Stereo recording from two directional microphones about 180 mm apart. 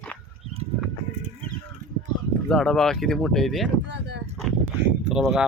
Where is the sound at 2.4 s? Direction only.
5° left (ahead or behind).